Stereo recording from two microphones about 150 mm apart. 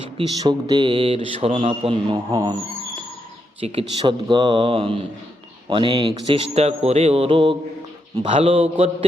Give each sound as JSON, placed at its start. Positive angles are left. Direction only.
{"t": 0.2, "sound": "speech", "side_deg": -30}
{"t": 3.6, "sound": "speech", "side_deg": -35}
{"t": 6.2, "sound": "speech", "side_deg": -40}